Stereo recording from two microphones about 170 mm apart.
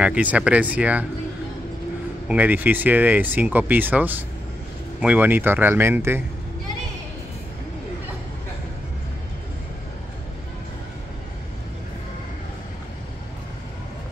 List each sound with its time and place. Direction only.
0.0 s speech: 5° right (ahead or behind)
2.2 s speech: 10° right (ahead or behind)